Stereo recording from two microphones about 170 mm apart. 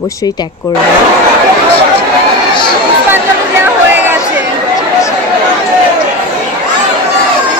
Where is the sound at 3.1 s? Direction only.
10° right (ahead or behind).